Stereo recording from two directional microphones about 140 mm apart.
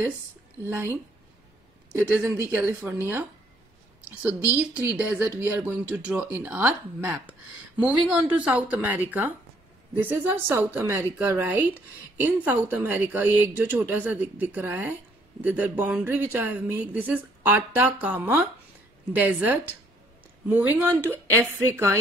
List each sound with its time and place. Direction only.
0.7 s speech: 15° right (ahead or behind)
2.0 s speech: 10° right (ahead or behind)
4.6 s a woman's voice: 10° right (ahead or behind)